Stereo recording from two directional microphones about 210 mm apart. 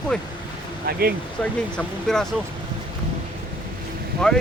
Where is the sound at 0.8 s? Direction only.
45° right (ahead or behind).